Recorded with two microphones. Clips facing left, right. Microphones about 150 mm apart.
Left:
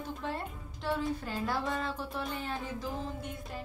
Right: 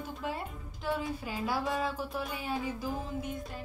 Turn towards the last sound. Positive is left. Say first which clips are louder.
# right 3 dB
turn(degrees=0)  # may be behind; listen again after turning